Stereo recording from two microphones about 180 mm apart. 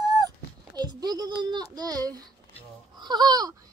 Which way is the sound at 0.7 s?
20° right (ahead or behind).